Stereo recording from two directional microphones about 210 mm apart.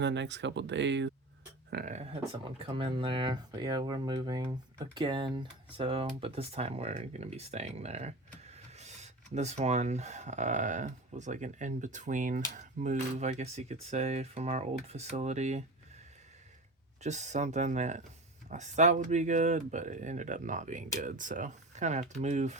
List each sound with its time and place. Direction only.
0.0 s speech: 55° right (ahead or behind)
1.7 s speech: 35° right (ahead or behind)
2.6 s speech: 25° right (ahead or behind)
17.0 s speech: 35° right (ahead or behind)